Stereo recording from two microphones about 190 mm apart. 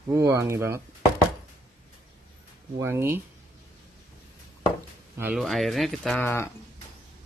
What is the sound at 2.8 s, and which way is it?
Speech, 15° right (ahead or behind).